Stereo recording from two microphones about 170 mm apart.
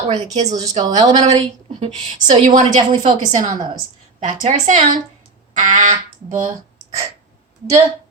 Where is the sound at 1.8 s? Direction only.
45° right (ahead or behind).